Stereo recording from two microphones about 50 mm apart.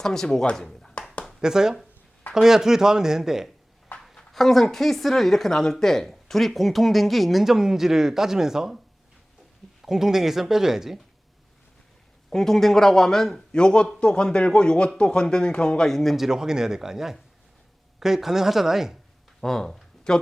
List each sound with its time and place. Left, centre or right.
0.0 s speech: centre
0.5 s a sound: centre
1.4 s speech: centre
3.9 s a sound: left
4.3 s speech: centre
9.8 s speech: centre
12.3 s speech: centre
13.5 s speech: centre
19.4 s a sound: centre